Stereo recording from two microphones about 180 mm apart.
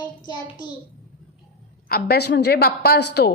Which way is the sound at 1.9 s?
60° left (ahead or behind).